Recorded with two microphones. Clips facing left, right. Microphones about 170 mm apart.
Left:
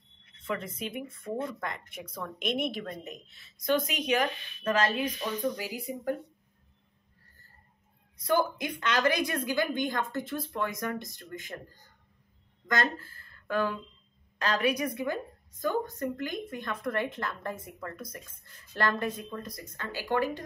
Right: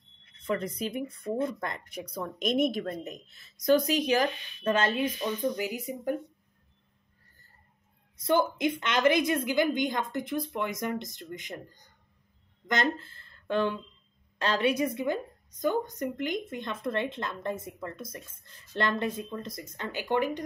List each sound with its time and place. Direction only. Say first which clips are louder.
0.5 s speech: right 4 dB; 40° right (ahead or behind); by 6.1 s 20° right (ahead or behind)
8.2 s speech: right 2 dB; 25° right (ahead or behind)